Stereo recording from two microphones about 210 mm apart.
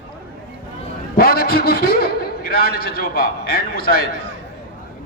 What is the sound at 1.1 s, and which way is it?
A man's voice, 45° left (ahead or behind).